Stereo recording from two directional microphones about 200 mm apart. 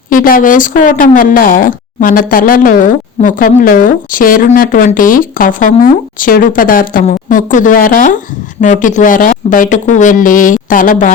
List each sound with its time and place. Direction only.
0.1 s a woman's voice: 45° left (ahead or behind)